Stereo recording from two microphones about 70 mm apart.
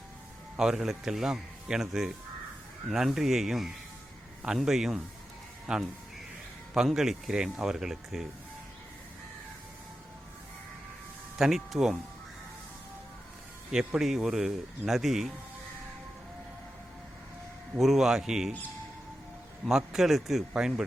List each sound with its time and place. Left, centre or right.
0.5 s a man's voice: centre
11.3 s speech: centre
13.7 s speech: centre
17.7 s speech: centre
19.6 s a man's voice: centre